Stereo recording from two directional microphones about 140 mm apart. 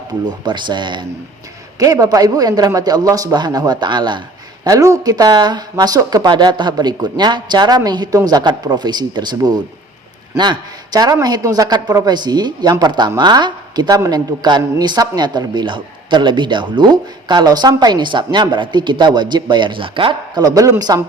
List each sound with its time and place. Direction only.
0.1 s a man's voice: 30° right (ahead or behind)